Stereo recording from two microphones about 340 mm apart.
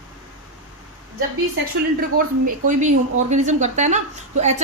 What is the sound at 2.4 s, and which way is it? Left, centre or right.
A woman's voice, right.